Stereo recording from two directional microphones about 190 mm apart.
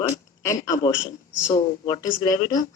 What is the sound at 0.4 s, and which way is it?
Speech, 15° left (ahead or behind).